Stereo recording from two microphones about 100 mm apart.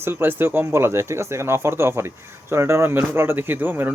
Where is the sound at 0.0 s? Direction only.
20° right (ahead or behind).